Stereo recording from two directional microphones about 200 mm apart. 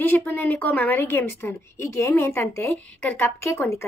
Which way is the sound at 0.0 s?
10° left (ahead or behind).